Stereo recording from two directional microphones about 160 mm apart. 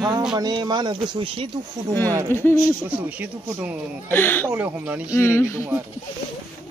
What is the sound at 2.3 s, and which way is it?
Speech, 15° left (ahead or behind).